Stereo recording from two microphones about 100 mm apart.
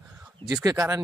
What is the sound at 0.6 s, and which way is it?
Speech, 35° right (ahead or behind).